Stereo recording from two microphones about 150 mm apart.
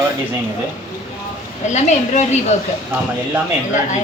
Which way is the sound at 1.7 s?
50° left (ahead or behind).